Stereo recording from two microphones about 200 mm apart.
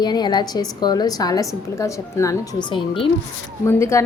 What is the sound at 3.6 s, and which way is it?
Speech, 15° left (ahead or behind).